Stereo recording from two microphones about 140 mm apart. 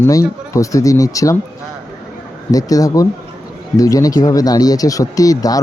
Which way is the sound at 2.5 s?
25° left (ahead or behind).